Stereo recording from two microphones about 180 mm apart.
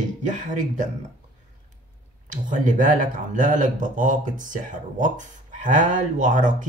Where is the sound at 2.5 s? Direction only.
45° right (ahead or behind).